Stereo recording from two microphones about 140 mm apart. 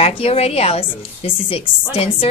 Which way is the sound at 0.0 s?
45° left (ahead or behind).